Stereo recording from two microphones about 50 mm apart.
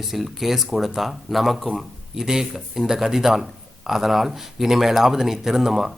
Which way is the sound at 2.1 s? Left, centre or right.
Centre.